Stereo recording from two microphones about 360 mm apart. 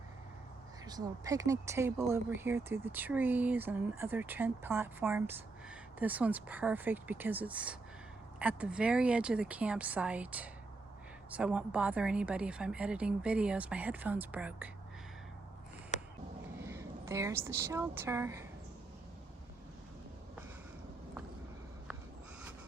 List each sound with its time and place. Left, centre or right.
0.9 s speech: centre
15.9 s a sound: centre
16.6 s a woman's voice: centre